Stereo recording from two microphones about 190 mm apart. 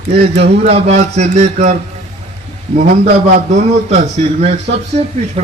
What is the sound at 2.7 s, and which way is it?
A man's voice, 45° right (ahead or behind).